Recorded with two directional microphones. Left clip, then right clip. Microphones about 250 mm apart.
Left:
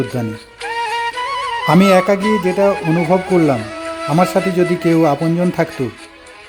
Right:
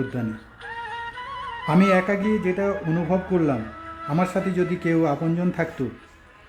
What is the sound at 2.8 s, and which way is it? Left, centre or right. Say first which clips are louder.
Speech: left 10 dB; left.